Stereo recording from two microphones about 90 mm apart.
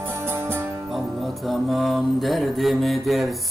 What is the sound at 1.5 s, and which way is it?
Mantra, centre (ahead or behind).